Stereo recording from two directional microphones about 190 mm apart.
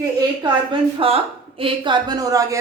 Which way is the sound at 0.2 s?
25° right (ahead or behind).